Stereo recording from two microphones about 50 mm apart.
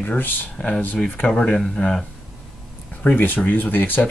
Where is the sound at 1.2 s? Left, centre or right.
Centre.